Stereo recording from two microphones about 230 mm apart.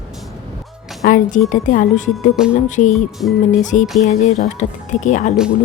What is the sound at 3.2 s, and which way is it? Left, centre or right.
Music, left.